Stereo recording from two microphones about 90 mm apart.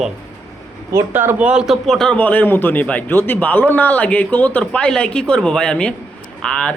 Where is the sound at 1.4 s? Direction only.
10° right (ahead or behind); by 2.1 s 5° left (ahead or behind).